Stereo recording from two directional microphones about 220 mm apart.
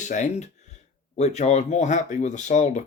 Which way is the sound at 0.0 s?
35° left (ahead or behind).